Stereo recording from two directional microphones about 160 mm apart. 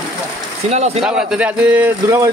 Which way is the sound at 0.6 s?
40° right (ahead or behind).